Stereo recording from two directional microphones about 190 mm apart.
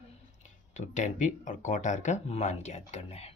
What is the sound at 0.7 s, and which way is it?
Speech, 40° left (ahead or behind).